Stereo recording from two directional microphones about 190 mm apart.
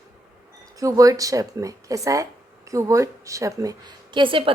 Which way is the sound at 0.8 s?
15° right (ahead or behind).